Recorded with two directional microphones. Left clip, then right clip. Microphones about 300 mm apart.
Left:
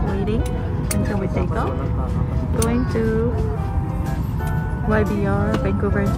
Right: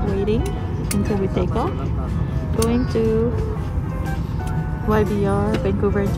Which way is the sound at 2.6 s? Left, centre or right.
Centre.